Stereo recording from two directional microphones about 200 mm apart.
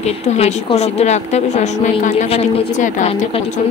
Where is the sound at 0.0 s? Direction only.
30° left (ahead or behind).